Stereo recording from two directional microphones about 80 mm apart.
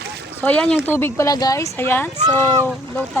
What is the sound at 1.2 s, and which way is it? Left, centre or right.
Speech, left.